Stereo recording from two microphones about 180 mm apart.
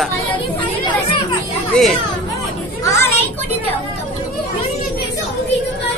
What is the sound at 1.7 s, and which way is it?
Speech, 5° left (ahead or behind).